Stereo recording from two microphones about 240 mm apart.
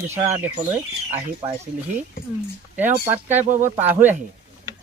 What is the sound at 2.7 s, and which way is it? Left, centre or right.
Speech, centre.